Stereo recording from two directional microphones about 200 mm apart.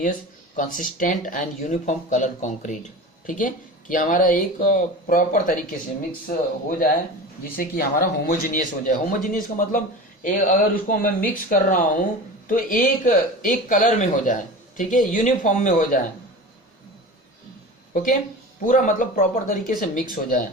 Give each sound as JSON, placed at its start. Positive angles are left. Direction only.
{"t": 0.0, "sound": "speech", "side_deg": 40}
{"t": 17.9, "sound": "speech", "side_deg": 40}